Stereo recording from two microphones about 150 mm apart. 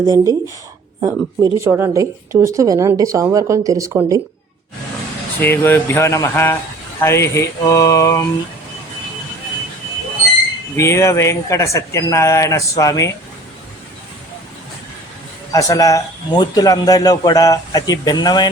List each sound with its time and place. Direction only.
0.0 s speech: 25° right (ahead or behind)
5.4 s speech: 15° left (ahead or behind)
10.8 s speech: 20° left (ahead or behind)
15.5 s speech: 20° left (ahead or behind)